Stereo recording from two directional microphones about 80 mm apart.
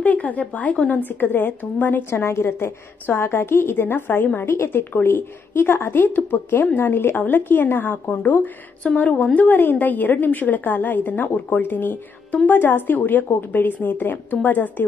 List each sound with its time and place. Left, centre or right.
0.0 s a woman's voice: centre